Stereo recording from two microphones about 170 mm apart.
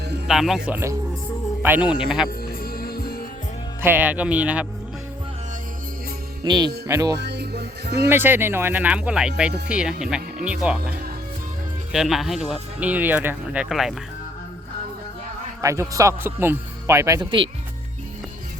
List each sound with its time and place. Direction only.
0.3 s speech: centre (ahead or behind)
2.5 s music: 60° left (ahead or behind)
3.8 s speech: 10° right (ahead or behind)
6.4 s speech: 25° right (ahead or behind)
7.2 s music: 80° right
8.1 s speech: 10° right (ahead or behind)
15.6 s speech: 20° right (ahead or behind)
17.2 s speech: 30° right (ahead or behind)